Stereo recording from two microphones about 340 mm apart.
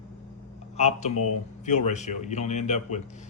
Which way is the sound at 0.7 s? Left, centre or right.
Centre.